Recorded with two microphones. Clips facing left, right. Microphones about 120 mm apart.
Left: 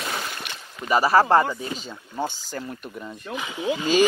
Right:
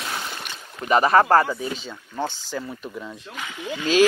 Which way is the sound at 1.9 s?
10° left (ahead or behind).